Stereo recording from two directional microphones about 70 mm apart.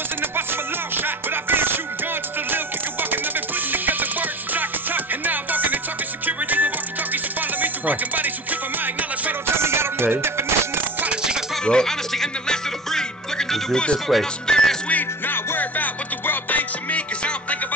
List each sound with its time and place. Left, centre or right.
0.2 s music: right
11.0 s music: centre
11.6 s music: centre
14.9 s music: left